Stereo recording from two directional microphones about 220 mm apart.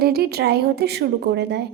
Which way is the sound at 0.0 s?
45° right (ahead or behind).